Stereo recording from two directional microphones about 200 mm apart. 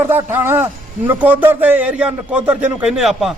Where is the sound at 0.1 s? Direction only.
10° right (ahead or behind).